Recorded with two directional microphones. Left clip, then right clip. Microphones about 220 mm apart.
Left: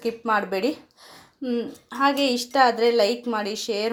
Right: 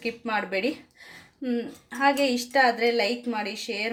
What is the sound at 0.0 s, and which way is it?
Speech, 15° left (ahead or behind).